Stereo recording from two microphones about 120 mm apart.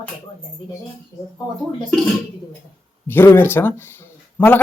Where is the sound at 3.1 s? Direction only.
20° left (ahead or behind).